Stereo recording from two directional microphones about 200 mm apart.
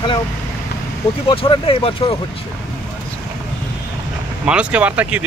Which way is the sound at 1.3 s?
25° left (ahead or behind).